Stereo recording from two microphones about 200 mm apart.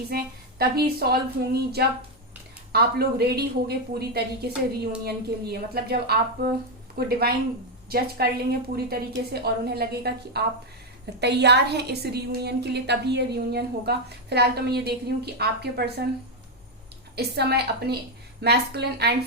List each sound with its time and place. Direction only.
0.1 s a woman's voice: 50° right (ahead or behind)
17.2 s speech: 55° right (ahead or behind)